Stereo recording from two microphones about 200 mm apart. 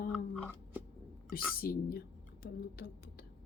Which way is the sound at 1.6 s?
50° left (ahead or behind).